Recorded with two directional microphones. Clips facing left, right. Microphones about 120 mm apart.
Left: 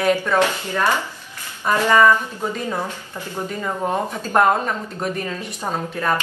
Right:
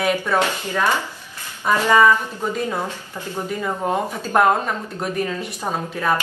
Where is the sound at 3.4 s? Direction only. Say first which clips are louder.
Even; 5° right (ahead or behind).